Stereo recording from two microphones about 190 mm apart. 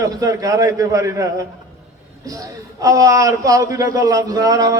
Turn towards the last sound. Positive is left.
turn(degrees=-20)  # may be behind; listen again after turning